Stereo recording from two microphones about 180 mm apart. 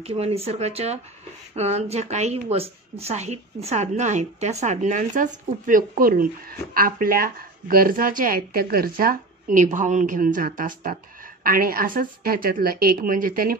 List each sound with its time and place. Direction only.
0.0 s a woman's voice: 35° right (ahead or behind); by 13.6 s 50° right (ahead or behind)